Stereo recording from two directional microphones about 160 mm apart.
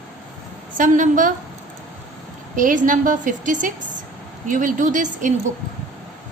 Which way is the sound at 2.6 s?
55° right (ahead or behind).